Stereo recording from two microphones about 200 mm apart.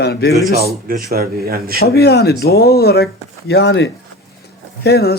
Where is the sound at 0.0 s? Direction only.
55° left (ahead or behind).